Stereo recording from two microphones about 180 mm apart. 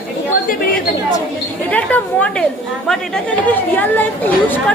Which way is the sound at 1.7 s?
10° left (ahead or behind).